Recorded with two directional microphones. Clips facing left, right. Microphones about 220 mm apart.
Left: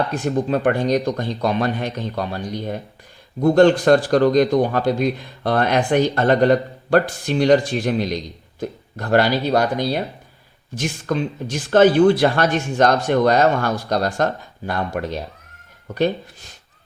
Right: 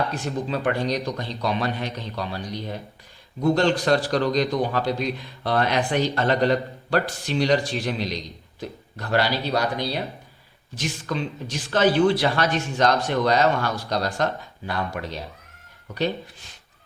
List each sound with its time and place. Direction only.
0.1 s a man's voice: 50° left (ahead or behind)